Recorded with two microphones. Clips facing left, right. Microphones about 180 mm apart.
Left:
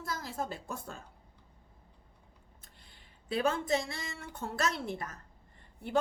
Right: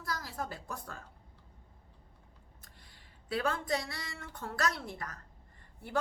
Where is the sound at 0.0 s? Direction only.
25° left (ahead or behind).